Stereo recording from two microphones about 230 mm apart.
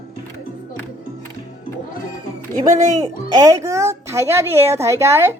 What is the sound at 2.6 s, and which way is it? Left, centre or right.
Speech, right.